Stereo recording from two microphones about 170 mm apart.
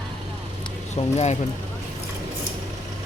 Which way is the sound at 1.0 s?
40° left (ahead or behind).